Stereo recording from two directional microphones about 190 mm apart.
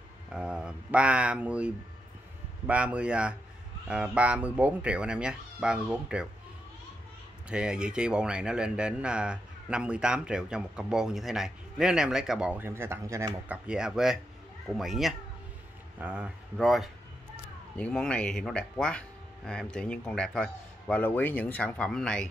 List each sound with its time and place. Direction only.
0.3 s speech: 5° right (ahead or behind)
7.4 s speech: 5° right (ahead or behind)
13.7 s speech: 5° right (ahead or behind)